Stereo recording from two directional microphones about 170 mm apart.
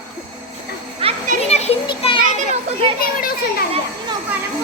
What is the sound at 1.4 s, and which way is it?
Children playing, 35° left (ahead or behind).